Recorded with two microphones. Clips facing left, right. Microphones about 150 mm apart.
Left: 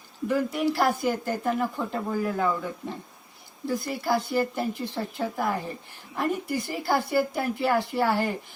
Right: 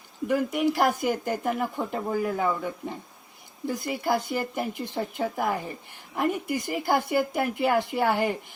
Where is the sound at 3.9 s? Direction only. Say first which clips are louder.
Right 1 dB; 15° right (ahead or behind).